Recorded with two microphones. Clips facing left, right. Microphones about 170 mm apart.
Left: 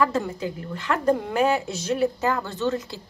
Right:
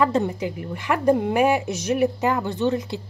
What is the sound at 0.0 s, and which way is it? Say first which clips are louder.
A woman's voice: right 3 dB; 20° right (ahead or behind).